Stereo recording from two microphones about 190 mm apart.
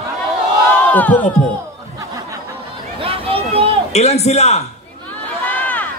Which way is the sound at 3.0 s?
30° right (ahead or behind).